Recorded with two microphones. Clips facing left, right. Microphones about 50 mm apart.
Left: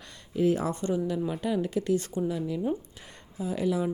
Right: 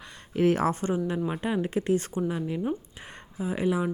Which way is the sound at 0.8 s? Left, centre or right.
Right.